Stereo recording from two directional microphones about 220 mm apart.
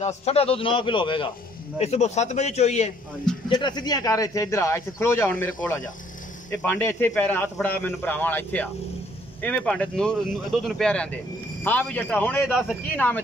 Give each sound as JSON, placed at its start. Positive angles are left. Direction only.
{"t": 0.0, "sound": "a man's voice", "side_deg": 30}
{"t": 3.4, "sound": "speech", "side_deg": 20}